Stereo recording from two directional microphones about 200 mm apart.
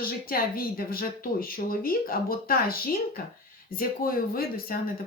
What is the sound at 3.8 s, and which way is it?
Speech, 45° left (ahead or behind).